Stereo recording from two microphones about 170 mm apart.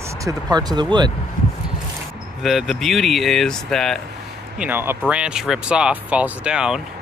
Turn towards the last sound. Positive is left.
turn(degrees=-5)  # may be behind; listen again after turning